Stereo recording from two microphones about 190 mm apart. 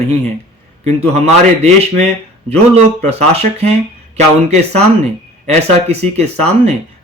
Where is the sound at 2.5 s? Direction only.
35° right (ahead or behind).